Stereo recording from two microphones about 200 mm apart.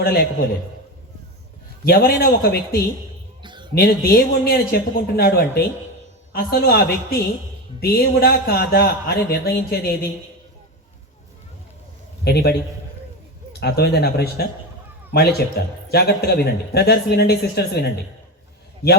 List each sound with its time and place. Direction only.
0.0 s a man's voice: 50° left (ahead or behind)
1.8 s a man's voice: 50° left (ahead or behind)
3.4 s a sound: 25° right (ahead or behind)
3.8 s a man's voice: 50° left (ahead or behind)
12.2 s a man's voice: 55° left (ahead or behind)
13.6 s a man's voice: 55° left (ahead or behind)